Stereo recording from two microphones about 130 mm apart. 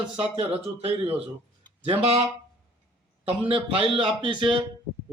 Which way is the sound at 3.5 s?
45° right (ahead or behind).